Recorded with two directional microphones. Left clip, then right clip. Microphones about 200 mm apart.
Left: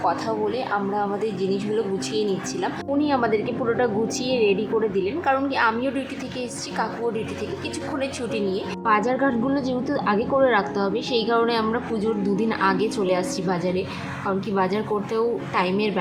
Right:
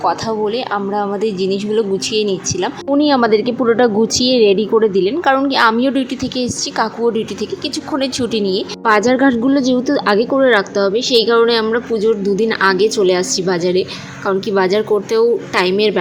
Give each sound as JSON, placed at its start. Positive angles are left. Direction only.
{"t": 0.0, "sound": "a woman's voice", "side_deg": -25}
{"t": 8.8, "sound": "a woman's voice", "side_deg": -30}